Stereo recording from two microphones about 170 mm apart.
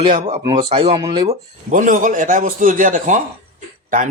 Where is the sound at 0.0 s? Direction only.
35° right (ahead or behind).